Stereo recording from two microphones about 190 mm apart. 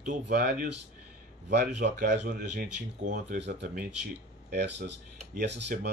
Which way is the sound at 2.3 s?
50° right (ahead or behind).